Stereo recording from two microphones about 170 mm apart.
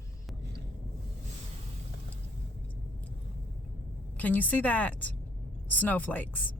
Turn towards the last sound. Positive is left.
turn(degrees=10)  # may be behind; listen again after turning